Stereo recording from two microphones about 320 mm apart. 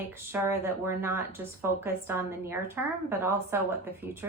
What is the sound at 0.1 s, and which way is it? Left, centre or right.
A woman's voice, centre.